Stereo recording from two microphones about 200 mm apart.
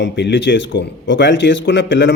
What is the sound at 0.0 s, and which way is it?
A man's voice, 60° left (ahead or behind).